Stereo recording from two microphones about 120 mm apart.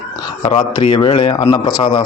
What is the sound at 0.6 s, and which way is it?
Speech, 45° left (ahead or behind).